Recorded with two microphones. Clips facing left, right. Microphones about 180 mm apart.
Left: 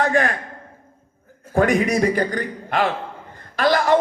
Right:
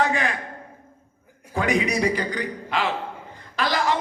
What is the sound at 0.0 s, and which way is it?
Speech, 50° left (ahead or behind).